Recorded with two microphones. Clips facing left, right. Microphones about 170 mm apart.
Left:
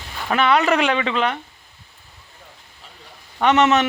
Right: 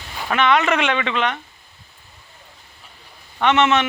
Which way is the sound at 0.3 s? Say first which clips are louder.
Left 1 dB; 35° left (ahead or behind).